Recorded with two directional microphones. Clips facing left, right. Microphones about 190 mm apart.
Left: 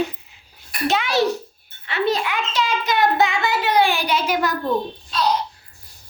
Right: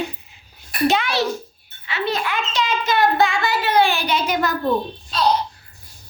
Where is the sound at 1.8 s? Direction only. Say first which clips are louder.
Left 3 dB; 55° left (ahead or behind).